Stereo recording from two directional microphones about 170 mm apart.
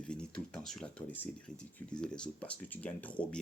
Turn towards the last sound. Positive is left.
turn(degrees=10)  # may be behind; listen again after turning